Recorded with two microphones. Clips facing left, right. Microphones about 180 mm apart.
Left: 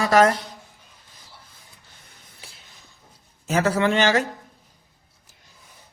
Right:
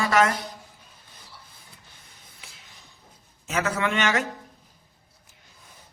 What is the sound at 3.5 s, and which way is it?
Speech, 35° left (ahead or behind).